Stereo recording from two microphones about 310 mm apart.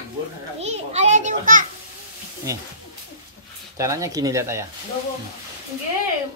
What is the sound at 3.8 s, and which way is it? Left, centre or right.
Speech, centre.